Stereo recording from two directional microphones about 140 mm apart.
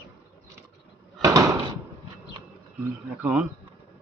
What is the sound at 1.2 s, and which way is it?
Door, 25° right (ahead or behind).